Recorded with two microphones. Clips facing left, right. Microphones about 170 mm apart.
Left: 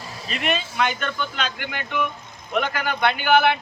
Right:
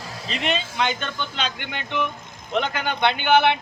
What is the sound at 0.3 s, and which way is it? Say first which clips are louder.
Speech: even; 25° right (ahead or behind).